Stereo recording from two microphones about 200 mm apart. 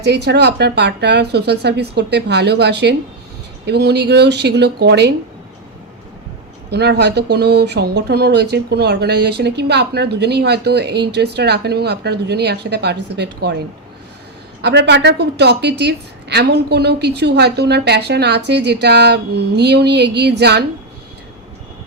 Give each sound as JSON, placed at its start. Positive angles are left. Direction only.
{"t": 0.0, "sound": "speech", "side_deg": -55}
{"t": 6.7, "sound": "speech", "side_deg": -55}
{"t": 14.6, "sound": "speech", "side_deg": -60}